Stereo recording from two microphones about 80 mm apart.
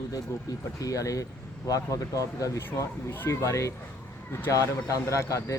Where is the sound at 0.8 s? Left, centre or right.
Left.